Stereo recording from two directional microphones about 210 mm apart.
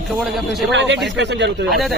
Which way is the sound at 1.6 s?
Centre (ahead or behind).